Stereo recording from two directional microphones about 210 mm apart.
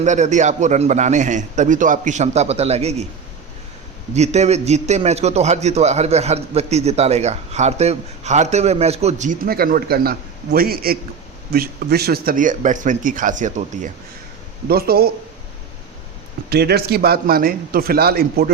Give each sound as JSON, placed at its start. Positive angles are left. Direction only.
{"t": 0.0, "sound": "a man's voice", "side_deg": -35}
{"t": 4.1, "sound": "a man's voice", "side_deg": -30}
{"t": 16.5, "sound": "a man's voice", "side_deg": -50}